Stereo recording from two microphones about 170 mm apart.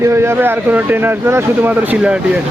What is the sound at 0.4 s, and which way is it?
Speech, 10° right (ahead or behind).